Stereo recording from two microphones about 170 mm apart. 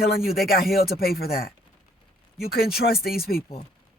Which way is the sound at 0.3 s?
65° left (ahead or behind).